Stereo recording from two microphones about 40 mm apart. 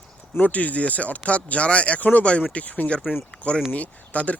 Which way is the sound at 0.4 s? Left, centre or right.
Left.